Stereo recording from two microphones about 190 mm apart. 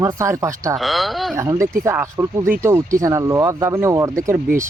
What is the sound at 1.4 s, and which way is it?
Speech, 15° right (ahead or behind).